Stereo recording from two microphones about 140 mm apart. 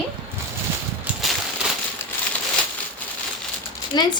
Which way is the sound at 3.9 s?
30° left (ahead or behind).